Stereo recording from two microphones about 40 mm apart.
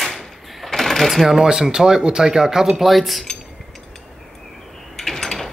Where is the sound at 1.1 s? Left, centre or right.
Centre.